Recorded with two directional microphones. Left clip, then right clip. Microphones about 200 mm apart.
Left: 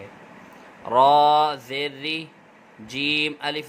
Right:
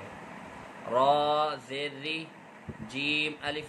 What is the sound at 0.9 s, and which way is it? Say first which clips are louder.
Speech: left 9 dB; 55° left (ahead or behind).